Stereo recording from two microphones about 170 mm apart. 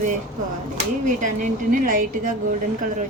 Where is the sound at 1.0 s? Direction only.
50° right (ahead or behind).